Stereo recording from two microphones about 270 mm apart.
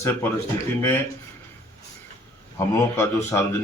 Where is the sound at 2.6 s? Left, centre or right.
Centre.